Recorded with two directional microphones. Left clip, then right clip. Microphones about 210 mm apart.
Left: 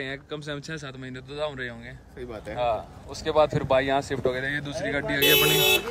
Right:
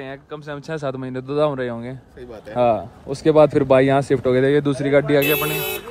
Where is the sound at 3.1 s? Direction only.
30° right (ahead or behind).